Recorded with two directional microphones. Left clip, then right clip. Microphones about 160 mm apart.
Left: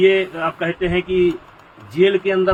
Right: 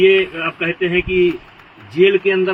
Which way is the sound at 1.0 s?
70° left (ahead or behind).